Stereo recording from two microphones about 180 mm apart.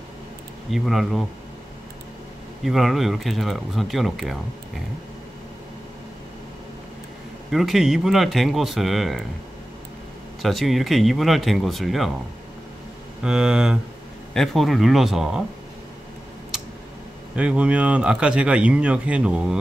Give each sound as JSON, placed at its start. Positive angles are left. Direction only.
{"t": 0.7, "sound": "speech", "side_deg": 0}
{"t": 2.6, "sound": "speech", "side_deg": 0}
{"t": 7.5, "sound": "speech", "side_deg": 0}
{"t": 10.4, "sound": "speech", "side_deg": 0}
{"t": 13.2, "sound": "speech", "side_deg": -5}
{"t": 17.4, "sound": "speech", "side_deg": -5}